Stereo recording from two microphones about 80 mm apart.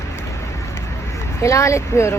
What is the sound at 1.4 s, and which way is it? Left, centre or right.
Speech, left.